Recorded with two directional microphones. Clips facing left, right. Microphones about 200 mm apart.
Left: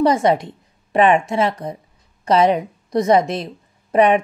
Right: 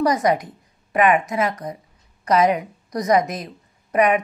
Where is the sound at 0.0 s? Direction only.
25° left (ahead or behind).